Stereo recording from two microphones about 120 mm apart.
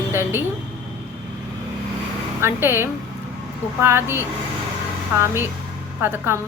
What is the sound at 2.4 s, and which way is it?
A woman's voice, 20° right (ahead or behind).